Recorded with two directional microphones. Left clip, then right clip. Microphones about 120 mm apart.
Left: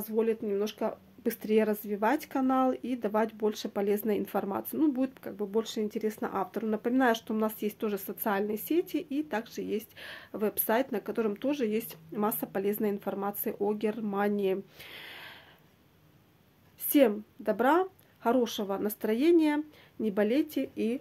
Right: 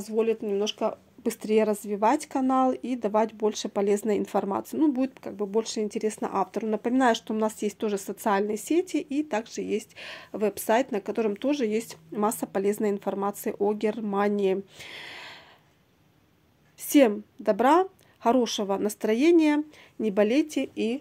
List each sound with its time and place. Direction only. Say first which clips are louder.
0.0 s a woman's voice: right 4 dB; 40° right (ahead or behind)
16.8 s a woman's voice: right 4 dB; 55° right (ahead or behind)